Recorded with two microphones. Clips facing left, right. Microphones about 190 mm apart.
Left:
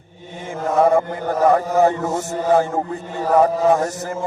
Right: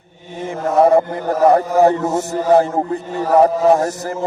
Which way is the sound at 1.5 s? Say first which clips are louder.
Right 3 dB; 35° right (ahead or behind).